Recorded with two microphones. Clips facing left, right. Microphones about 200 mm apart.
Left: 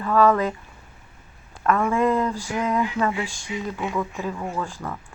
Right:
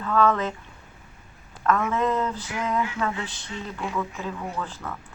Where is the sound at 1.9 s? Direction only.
10° left (ahead or behind).